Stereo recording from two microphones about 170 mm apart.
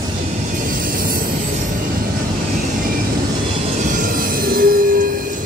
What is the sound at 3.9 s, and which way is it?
Music, 55° right (ahead or behind).